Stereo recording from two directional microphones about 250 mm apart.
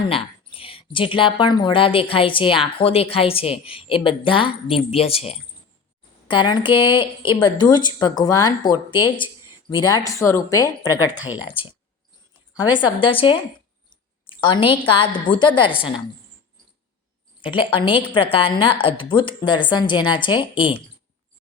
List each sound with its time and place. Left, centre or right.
0.1 s a woman's voice: left
12.5 s a woman's voice: centre
17.4 s a woman's voice: centre